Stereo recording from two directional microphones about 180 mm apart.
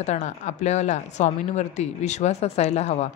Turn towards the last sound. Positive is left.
turn(degrees=40)  # may be behind; listen again after turning